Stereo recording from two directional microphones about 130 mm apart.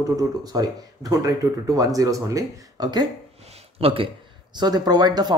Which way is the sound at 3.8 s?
45° right (ahead or behind).